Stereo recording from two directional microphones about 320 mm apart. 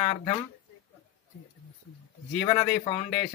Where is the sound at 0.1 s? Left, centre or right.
Centre.